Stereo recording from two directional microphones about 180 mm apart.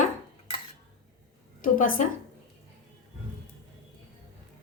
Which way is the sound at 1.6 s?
50° left (ahead or behind).